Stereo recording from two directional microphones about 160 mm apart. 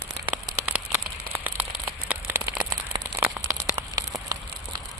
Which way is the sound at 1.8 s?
10° right (ahead or behind).